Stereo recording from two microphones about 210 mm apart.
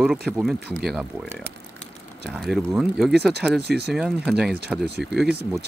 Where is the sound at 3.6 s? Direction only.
50° right (ahead or behind).